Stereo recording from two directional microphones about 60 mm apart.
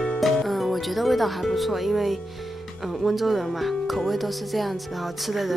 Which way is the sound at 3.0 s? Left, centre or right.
Centre.